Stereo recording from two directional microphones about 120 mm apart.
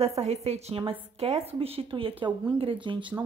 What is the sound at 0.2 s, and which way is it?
A woman's voice, 60° right (ahead or behind).